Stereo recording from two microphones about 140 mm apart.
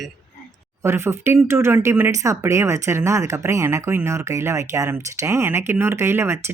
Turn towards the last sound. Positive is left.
turn(degrees=-20)  # may be behind; listen again after turning